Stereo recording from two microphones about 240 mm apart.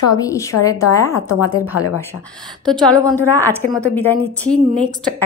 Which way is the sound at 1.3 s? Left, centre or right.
Left.